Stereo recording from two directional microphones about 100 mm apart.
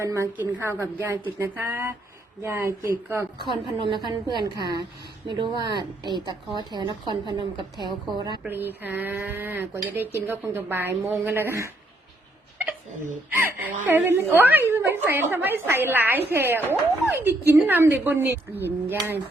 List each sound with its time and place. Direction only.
0.0 s a woman's voice: 30° right (ahead or behind)
3.5 s a woman's voice: 55° right (ahead or behind)
8.4 s a woman's voice: 20° right (ahead or behind)
13.4 s a woman's voice: 20° right (ahead or behind)